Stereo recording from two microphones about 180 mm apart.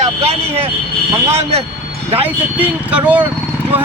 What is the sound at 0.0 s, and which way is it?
Speech, 35° right (ahead or behind).